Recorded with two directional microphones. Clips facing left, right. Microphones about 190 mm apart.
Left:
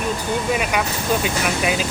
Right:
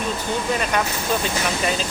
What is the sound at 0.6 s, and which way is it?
Speech, 10° left (ahead or behind).